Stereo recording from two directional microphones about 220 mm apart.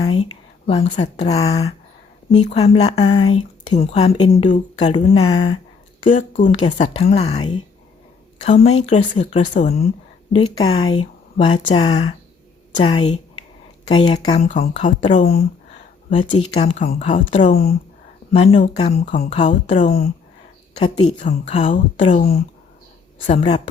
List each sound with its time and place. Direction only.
0.7 s speech: 25° left (ahead or behind)
3.2 s speech: 75° left (ahead or behind)
4.0 s speech: 30° left (ahead or behind)
6.1 s speech: 35° left (ahead or behind)
10.3 s speech: 20° left (ahead or behind); by 17.7 s 40° left (ahead or behind)
18.3 s speech: 30° left (ahead or behind)